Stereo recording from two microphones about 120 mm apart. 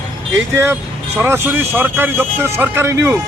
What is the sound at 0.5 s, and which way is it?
Speech, 25° right (ahead or behind).